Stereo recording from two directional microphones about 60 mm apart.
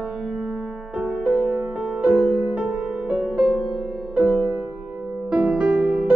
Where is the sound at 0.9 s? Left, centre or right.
Right.